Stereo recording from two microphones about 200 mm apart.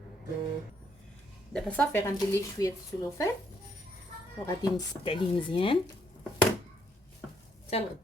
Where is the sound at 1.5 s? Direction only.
5° left (ahead or behind).